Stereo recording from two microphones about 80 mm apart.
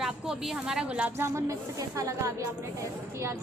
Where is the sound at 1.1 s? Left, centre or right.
Right.